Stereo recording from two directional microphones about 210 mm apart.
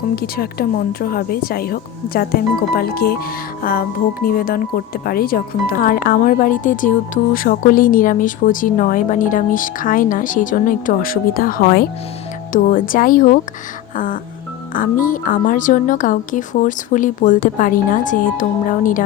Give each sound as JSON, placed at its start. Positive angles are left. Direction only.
{"t": 0.2, "sound": "a woman's voice", "side_deg": 45}
{"t": 13.9, "sound": "music", "side_deg": 40}
{"t": 14.7, "sound": "speech", "side_deg": 40}